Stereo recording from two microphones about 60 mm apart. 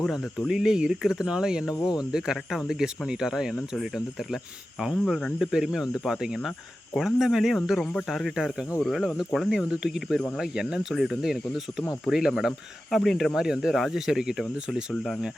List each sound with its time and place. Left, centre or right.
0.0 s speech: centre
5.4 s speech: centre
7.8 s speech: centre
8.0 s speech: centre
9.6 s speech: centre